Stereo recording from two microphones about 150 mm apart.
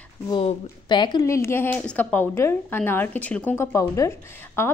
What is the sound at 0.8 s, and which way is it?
A woman's voice, 30° left (ahead or behind).